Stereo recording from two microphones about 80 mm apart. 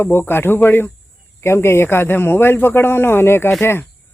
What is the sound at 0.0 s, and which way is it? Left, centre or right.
Speech, left.